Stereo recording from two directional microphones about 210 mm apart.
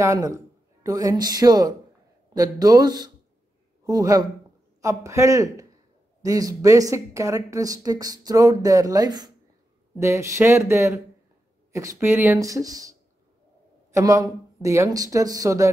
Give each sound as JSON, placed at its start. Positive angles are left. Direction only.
{"t": 0.0, "sound": "speech", "side_deg": -15}
{"t": 13.9, "sound": "speech", "side_deg": -15}